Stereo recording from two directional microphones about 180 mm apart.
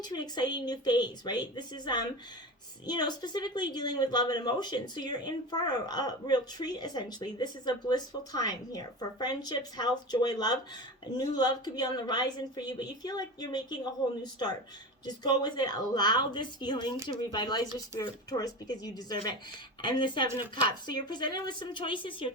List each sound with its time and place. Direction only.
0.0 s speech: 25° left (ahead or behind)